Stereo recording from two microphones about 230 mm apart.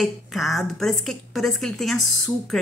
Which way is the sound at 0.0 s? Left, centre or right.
Centre.